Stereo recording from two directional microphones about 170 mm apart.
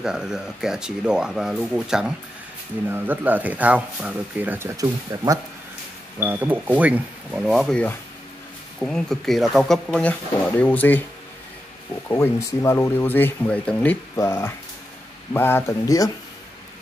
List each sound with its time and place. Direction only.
0.0 s speech: 5° right (ahead or behind)
12.1 s speech: 15° left (ahead or behind)